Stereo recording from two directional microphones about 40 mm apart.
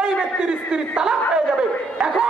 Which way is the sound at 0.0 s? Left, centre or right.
Centre.